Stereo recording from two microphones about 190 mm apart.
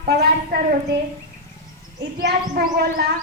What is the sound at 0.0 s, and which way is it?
Speech, 55° right (ahead or behind).